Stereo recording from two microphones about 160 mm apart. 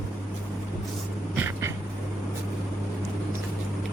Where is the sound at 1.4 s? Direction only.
15° right (ahead or behind).